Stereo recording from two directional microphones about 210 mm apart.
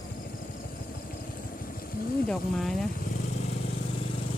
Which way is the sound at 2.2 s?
Centre (ahead or behind).